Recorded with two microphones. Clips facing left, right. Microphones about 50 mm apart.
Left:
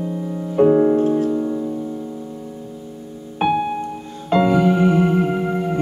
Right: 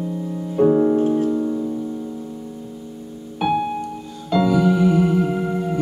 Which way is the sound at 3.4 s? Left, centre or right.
Left.